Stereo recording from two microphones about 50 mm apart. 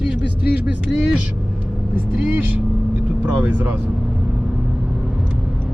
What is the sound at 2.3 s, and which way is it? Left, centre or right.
Speech, right.